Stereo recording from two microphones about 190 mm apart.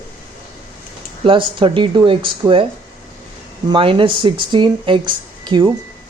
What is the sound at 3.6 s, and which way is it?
Speech, 25° right (ahead or behind).